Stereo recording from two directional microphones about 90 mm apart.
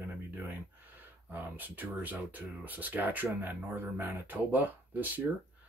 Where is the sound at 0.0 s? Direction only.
20° right (ahead or behind).